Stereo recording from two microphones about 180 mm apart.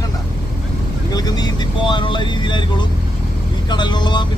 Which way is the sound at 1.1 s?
20° left (ahead or behind).